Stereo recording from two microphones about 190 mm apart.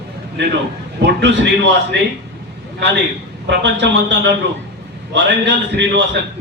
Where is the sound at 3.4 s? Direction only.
70° right (ahead or behind).